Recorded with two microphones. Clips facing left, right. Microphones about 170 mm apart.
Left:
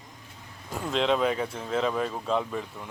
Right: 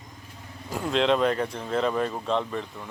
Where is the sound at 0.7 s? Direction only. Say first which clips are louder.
Right 2 dB; centre (ahead or behind).